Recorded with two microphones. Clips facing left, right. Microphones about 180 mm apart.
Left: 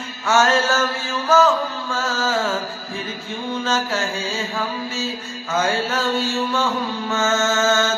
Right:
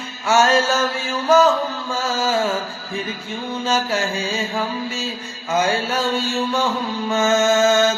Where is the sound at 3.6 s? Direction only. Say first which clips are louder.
Right 3 dB; 10° right (ahead or behind).